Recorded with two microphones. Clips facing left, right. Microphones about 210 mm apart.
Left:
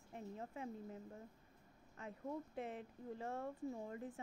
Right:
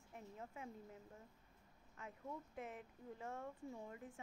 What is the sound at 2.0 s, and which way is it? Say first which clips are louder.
Speech: left 5 dB; 35° left (ahead or behind).